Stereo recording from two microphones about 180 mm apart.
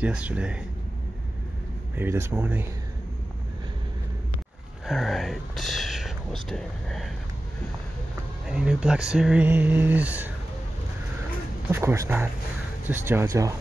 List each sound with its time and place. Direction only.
0.0 s speech: 5° right (ahead or behind)
2.0 s speech: 15° right (ahead or behind)
4.8 s speech: centre (ahead or behind)
8.5 s speech: 5° right (ahead or behind)
11.7 s speech: 15° right (ahead or behind)